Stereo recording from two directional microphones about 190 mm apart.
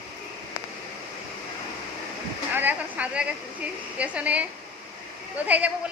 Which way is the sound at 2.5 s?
10° right (ahead or behind).